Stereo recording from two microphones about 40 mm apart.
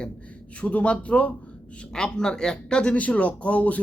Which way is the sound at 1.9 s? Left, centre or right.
Centre.